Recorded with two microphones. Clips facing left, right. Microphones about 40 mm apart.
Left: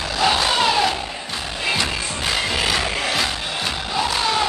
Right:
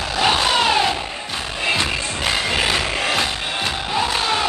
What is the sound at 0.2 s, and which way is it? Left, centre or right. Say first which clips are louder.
Vehicle: right 1 dB; right.